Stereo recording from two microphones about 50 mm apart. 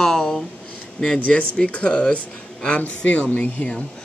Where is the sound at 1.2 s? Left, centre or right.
Left.